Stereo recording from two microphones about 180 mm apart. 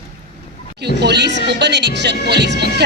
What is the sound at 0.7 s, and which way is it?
Music, 65° right (ahead or behind).